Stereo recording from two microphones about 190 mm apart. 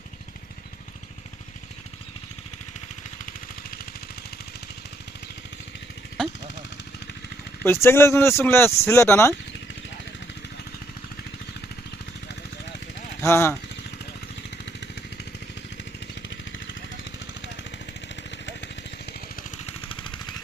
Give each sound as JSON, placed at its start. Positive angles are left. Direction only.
{"t": 7.6, "sound": "speech", "side_deg": 10}
{"t": 13.2, "sound": "speech", "side_deg": 15}
{"t": 14.6, "sound": "vehicle", "side_deg": 65}
{"t": 18.2, "sound": "vehicle", "side_deg": 70}
{"t": 19.6, "sound": "vehicle", "side_deg": 30}